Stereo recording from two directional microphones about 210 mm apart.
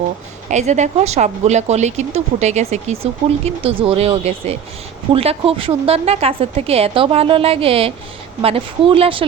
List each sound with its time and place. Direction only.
0.5 s a woman's voice: 35° right (ahead or behind)